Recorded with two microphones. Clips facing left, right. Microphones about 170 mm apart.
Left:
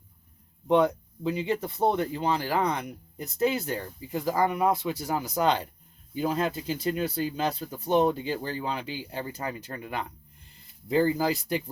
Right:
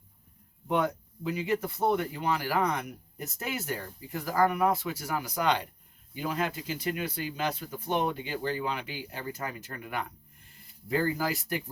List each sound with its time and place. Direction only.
0.7 s speech: 25° left (ahead or behind)
4.1 s speech: 20° left (ahead or behind)